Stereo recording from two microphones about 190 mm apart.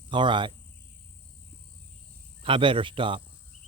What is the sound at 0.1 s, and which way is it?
Speech, 25° right (ahead or behind).